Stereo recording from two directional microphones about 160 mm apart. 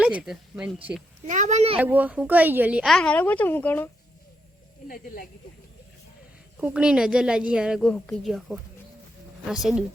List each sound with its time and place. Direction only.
0.0 s a woman's voice: 5° right (ahead or behind)
1.3 s speech: 50° right (ahead or behind)
1.8 s a woman's voice: 10° right (ahead or behind); by 3.8 s 10° left (ahead or behind)
6.6 s a woman's voice: 10° right (ahead or behind)